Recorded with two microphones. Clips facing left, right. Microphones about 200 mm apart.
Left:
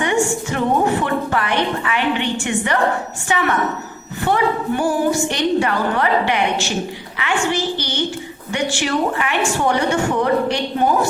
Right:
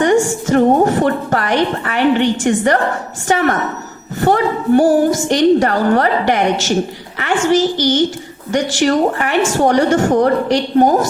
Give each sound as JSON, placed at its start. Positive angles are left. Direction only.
{"t": 0.0, "sound": "a woman's voice", "side_deg": -40}